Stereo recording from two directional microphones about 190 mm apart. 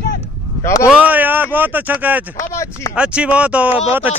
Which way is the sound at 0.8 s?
5° right (ahead or behind).